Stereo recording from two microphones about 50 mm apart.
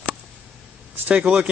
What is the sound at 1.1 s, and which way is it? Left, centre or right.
Speech, centre.